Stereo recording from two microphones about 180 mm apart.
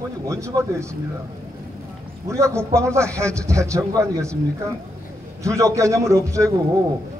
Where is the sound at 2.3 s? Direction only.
15° right (ahead or behind).